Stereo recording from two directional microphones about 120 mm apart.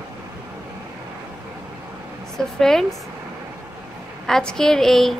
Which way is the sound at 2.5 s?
5° left (ahead or behind).